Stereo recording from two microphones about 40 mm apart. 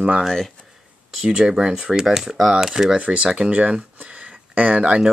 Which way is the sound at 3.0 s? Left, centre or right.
Right.